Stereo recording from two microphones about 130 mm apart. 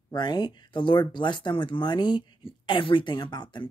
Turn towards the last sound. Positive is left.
turn(degrees=35)  # may be behind; listen again after turning